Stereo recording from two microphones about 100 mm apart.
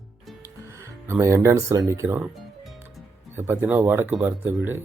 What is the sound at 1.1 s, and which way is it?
Speech, 30° right (ahead or behind).